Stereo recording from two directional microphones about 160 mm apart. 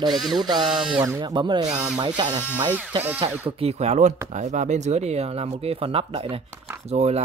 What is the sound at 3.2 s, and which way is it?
Speech, 35° right (ahead or behind).